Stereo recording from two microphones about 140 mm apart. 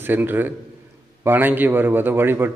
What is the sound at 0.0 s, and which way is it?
A man's voice, 15° right (ahead or behind).